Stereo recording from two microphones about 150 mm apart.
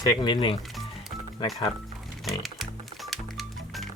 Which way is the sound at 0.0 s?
30° left (ahead or behind).